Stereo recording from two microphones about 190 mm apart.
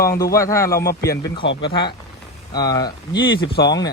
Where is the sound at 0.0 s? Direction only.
15° left (ahead or behind).